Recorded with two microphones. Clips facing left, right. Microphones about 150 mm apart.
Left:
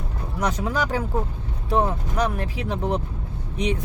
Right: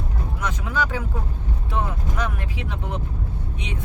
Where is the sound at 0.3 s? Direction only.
35° left (ahead or behind).